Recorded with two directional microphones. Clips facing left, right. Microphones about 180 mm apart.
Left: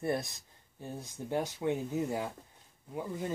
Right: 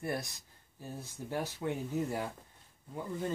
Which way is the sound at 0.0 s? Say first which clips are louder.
Left 4 dB; 25° left (ahead or behind).